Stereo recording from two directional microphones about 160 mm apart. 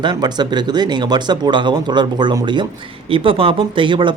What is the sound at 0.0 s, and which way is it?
Speech, 25° right (ahead or behind).